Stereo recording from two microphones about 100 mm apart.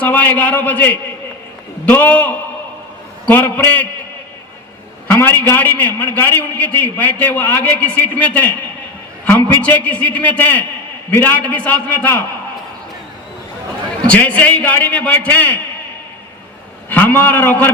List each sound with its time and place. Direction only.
0.0 s a man's voice: 15° left (ahead or behind)
5.1 s a man's voice: 15° left (ahead or behind)
9.6 s a man's voice: 15° left (ahead or behind)
14.1 s a man's voice: 15° left (ahead or behind)
16.9 s a man's voice: 15° left (ahead or behind)